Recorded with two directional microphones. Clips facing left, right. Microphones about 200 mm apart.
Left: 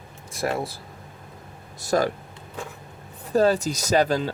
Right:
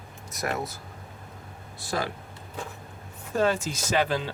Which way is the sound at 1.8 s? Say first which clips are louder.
Left 8 dB; 45° left (ahead or behind).